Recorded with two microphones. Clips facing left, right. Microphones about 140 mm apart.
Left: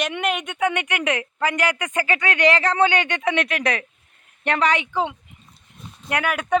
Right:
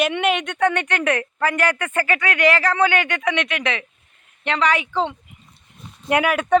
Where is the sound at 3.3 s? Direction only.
35° left (ahead or behind).